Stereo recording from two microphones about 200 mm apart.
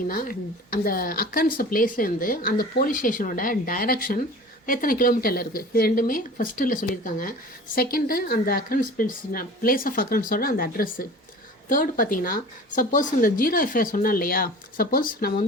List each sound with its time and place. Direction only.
0.1 s speech: 45° left (ahead or behind)